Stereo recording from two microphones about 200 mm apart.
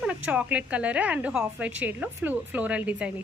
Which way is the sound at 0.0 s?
5° right (ahead or behind).